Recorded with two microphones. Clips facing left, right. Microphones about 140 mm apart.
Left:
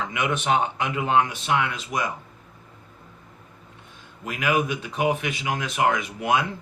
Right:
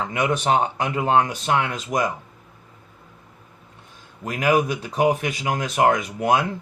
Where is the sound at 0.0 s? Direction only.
40° right (ahead or behind).